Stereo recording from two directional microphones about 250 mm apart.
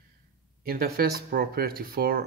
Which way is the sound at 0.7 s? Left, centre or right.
Right.